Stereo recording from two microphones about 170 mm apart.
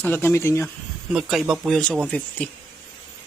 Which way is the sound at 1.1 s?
Centre (ahead or behind).